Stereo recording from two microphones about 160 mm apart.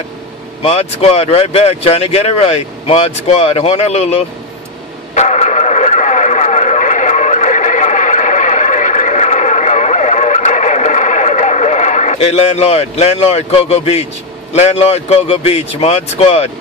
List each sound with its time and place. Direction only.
0.6 s speech: 40° left (ahead or behind)
5.1 s radio: 45° left (ahead or behind)
14.5 s speech: 40° left (ahead or behind)